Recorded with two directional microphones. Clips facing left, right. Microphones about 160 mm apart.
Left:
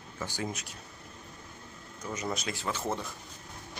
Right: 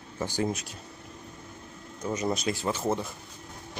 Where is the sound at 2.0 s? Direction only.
25° right (ahead or behind).